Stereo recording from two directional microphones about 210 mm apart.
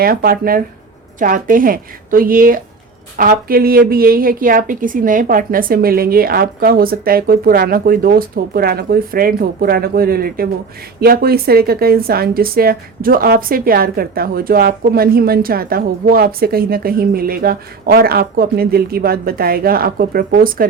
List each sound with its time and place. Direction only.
0.0 s a woman's voice: 45° right (ahead or behind)